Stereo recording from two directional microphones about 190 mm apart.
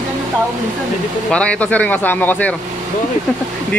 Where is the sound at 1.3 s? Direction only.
5° left (ahead or behind).